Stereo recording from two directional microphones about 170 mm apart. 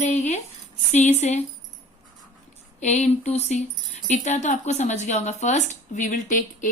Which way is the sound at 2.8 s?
40° left (ahead or behind).